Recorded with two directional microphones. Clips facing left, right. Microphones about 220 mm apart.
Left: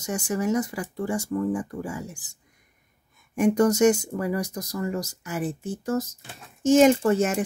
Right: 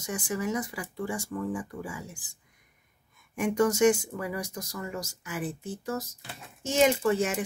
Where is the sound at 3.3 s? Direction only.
40° left (ahead or behind).